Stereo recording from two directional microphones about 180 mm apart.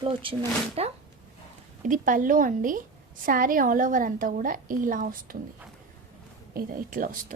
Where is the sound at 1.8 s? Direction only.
45° right (ahead or behind).